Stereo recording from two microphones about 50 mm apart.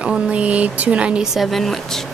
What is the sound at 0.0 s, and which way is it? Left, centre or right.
Speech, right.